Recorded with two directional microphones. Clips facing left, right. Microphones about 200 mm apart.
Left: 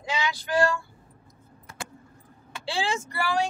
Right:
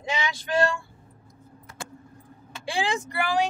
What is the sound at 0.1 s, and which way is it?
Female singing, 25° right (ahead or behind).